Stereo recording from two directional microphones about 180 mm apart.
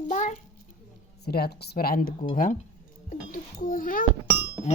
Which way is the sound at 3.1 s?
50° left (ahead or behind).